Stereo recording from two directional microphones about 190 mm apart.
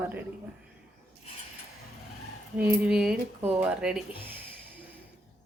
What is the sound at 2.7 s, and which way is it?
Speech, 5° right (ahead or behind).